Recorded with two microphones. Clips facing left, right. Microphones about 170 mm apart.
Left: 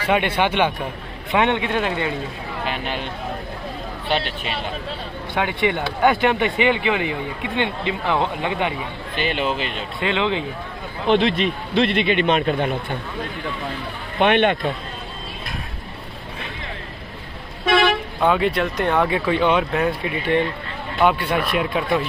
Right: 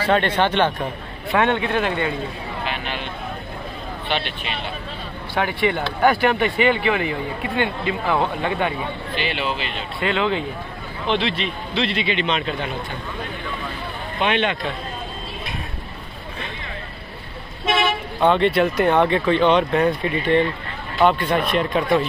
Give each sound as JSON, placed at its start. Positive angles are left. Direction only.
{"t": 0.1, "sound": "a man's voice", "side_deg": 10}
{"t": 4.1, "sound": "speech", "side_deg": 40}
{"t": 5.3, "sound": "a man's voice", "side_deg": 20}
{"t": 9.2, "sound": "speech", "side_deg": 45}
{"t": 9.9, "sound": "speech", "side_deg": 20}
{"t": 11.1, "sound": "speech", "side_deg": 45}
{"t": 14.1, "sound": "speech", "side_deg": 55}
{"t": 18.2, "sound": "speech", "side_deg": 5}